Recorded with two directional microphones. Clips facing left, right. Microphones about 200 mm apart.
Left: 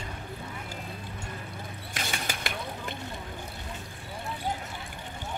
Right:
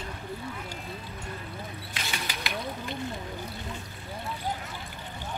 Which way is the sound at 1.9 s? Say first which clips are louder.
Left 3 dB; 50° left (ahead or behind).